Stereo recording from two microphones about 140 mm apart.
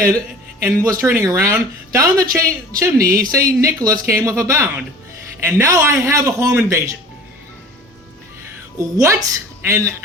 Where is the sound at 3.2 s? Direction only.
90° right.